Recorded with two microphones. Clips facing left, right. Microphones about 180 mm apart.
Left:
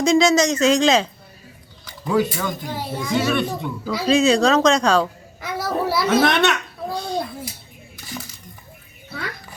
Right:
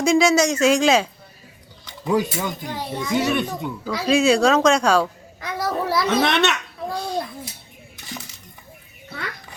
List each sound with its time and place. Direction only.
0.0 s speech: 10° right (ahead or behind)
2.6 s a child's voice: 5° left (ahead or behind)
3.2 s speech: 15° right (ahead or behind)
5.4 s a sound: 5° left (ahead or behind)